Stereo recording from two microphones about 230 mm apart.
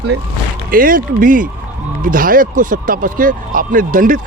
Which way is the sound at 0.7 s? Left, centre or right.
Right.